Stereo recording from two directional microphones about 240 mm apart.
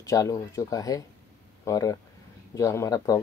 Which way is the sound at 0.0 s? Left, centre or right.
Centre.